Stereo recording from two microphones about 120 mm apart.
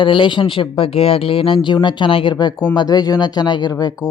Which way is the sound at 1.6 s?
40° left (ahead or behind).